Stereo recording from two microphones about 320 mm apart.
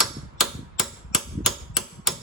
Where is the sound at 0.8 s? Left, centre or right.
Centre.